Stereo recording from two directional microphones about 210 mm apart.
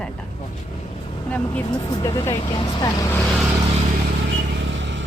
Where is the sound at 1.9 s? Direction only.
20° left (ahead or behind).